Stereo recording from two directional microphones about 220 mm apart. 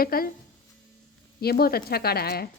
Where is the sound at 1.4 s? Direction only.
45° left (ahead or behind).